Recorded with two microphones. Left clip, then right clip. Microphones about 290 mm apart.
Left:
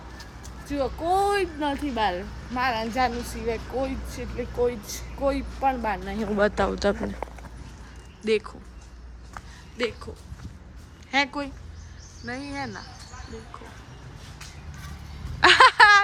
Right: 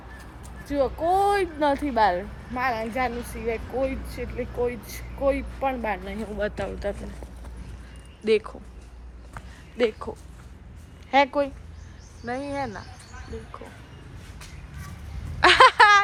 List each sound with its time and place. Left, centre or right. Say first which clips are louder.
0.7 s speech: right 2 dB; centre
6.5 s speech: left 6 dB; centre
8.2 s speech: right 2 dB; centre
9.3 s a sound: left 1 dB; centre
11.1 s speech: right 5 dB; centre
15.4 s a sound: even; centre